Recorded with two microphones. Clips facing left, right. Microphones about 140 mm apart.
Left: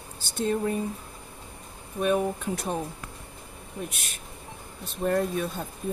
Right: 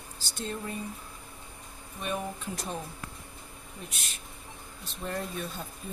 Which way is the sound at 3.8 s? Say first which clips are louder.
Left 5 dB; 55° left (ahead or behind).